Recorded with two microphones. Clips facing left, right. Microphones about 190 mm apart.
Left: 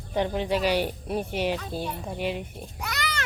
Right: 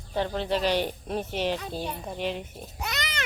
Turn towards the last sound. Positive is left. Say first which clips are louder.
# left 1 dB
turn(degrees=-20)  # may be behind; listen again after turning